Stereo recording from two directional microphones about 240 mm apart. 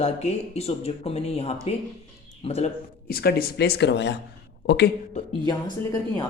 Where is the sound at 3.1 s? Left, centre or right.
Left.